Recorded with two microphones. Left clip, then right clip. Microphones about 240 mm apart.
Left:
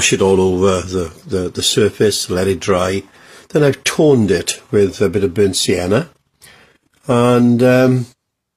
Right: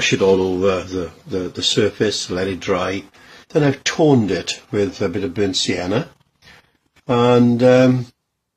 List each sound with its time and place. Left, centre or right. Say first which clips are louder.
0.0 s speech: left 2 dB; left